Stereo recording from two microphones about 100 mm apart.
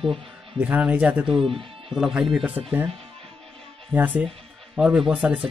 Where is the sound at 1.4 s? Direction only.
65° right (ahead or behind).